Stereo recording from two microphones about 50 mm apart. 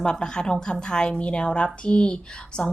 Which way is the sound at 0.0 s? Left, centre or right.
Centre.